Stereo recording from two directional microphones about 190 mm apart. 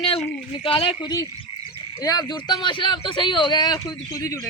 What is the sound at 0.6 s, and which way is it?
Speech, 30° left (ahead or behind).